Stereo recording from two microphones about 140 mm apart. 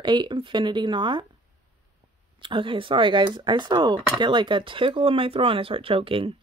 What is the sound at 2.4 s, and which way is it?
Speech, 35° right (ahead or behind).